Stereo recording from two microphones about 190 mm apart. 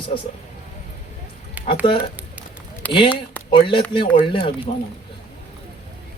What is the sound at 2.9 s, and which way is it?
Speech, 25° left (ahead or behind).